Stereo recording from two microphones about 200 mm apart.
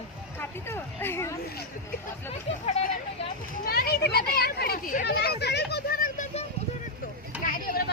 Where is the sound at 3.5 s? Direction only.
50° left (ahead or behind).